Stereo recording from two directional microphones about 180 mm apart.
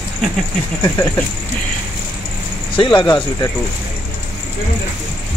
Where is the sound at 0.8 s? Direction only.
15° left (ahead or behind).